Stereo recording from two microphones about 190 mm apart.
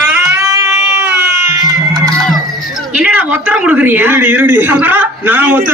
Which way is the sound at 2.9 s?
10° right (ahead or behind).